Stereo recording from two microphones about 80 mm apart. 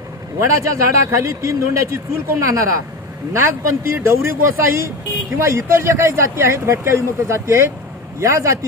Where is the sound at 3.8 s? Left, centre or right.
Right.